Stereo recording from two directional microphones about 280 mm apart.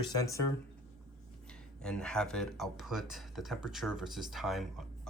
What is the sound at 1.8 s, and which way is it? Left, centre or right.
Speech, centre.